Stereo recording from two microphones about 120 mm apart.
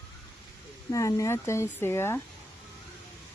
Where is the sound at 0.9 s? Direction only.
25° left (ahead or behind).